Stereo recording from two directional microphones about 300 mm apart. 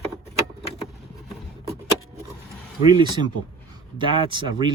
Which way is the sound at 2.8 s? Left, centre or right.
Centre.